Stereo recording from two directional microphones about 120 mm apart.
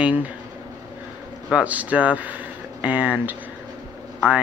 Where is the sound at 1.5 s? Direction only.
10° right (ahead or behind).